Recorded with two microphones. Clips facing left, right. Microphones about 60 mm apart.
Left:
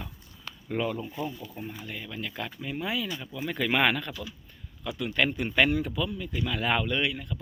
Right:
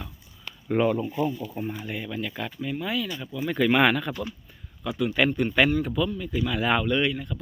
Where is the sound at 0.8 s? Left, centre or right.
Right.